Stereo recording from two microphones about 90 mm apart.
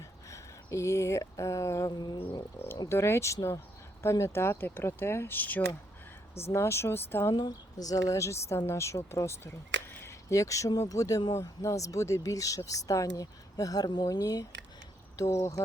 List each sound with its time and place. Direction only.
0.0 s a sound: 35° left (ahead or behind)
2.0 s bird: 50° left (ahead or behind)
2.9 s speech: 30° left (ahead or behind)
7.3 s speech: 45° left (ahead or behind)
14.2 s speech: 40° left (ahead or behind)